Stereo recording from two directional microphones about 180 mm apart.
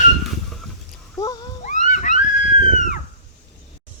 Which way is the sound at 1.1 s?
20° left (ahead or behind).